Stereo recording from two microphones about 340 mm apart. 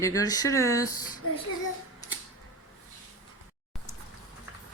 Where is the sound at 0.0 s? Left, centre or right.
Centre.